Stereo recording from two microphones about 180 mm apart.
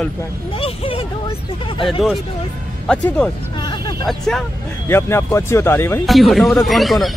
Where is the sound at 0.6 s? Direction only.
30° left (ahead or behind).